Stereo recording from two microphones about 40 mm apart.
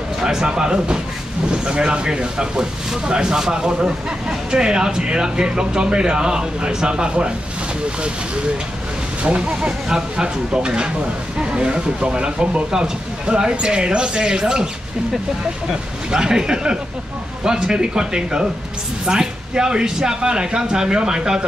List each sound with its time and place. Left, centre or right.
0.2 s speech: centre
9.2 s speech: right
15.7 s speech: centre